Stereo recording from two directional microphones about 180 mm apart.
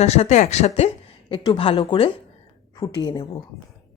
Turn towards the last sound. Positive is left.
turn(degrees=25)  # may be behind; listen again after turning